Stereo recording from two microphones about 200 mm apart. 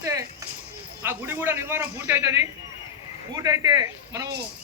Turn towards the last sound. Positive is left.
turn(degrees=-15)  # may be behind; listen again after turning